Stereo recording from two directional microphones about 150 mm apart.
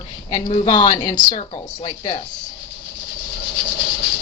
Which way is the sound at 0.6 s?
25° left (ahead or behind).